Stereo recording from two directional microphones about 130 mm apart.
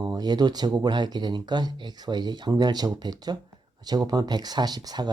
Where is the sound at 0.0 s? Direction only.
30° right (ahead or behind).